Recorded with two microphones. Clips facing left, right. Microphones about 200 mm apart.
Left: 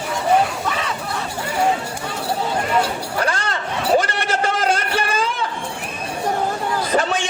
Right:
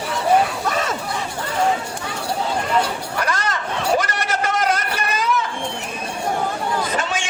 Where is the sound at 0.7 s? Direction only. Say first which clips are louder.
Right 2 dB; 45° right (ahead or behind).